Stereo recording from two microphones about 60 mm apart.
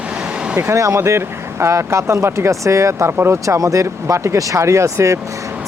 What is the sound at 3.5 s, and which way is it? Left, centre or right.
Speech, right.